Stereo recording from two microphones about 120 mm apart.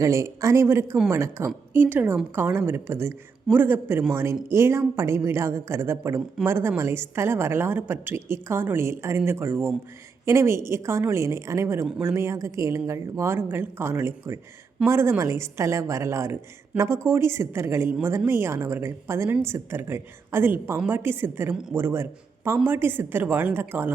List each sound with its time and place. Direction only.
0.0 s a woman's voice: 25° right (ahead or behind)
21.5 s speech: 5° right (ahead or behind)
21.8 s a woman's voice: 20° right (ahead or behind)